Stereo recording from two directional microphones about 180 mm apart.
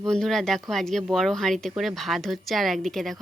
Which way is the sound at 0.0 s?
5° left (ahead or behind).